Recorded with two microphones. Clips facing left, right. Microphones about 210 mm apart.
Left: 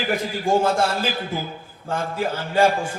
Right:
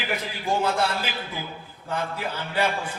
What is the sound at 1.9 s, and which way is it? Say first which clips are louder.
A man's voice: left 5 dB; 45° left (ahead or behind).